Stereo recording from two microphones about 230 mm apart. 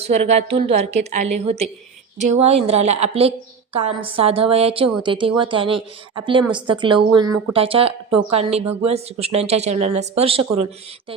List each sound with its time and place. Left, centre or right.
0.0 s a woman's voice: right